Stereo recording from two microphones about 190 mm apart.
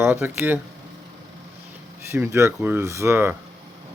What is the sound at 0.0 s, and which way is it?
Speech, 15° right (ahead or behind).